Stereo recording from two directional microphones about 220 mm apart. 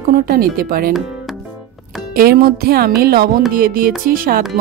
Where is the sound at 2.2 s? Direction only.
45° right (ahead or behind).